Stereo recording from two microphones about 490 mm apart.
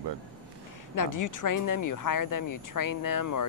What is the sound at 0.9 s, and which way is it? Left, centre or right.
Speech, left.